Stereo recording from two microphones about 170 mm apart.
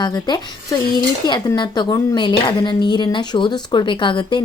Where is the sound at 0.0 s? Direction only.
25° left (ahead or behind).